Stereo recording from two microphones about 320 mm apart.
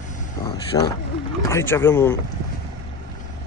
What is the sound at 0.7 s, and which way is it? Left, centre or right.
Speech, centre.